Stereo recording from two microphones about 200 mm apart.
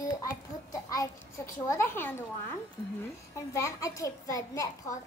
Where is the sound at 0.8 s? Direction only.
15° left (ahead or behind).